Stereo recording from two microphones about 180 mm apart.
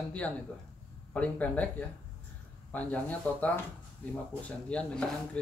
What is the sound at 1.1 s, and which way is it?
Speech, 10° left (ahead or behind).